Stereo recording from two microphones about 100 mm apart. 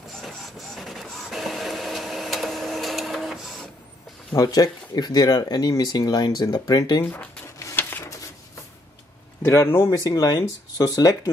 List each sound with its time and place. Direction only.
0.2 s printer: centre (ahead or behind)
4.4 s speech: 40° left (ahead or behind)
7.0 s speech: 20° left (ahead or behind)
7.8 s a sound: 20° left (ahead or behind)
9.4 s speech: 30° left (ahead or behind)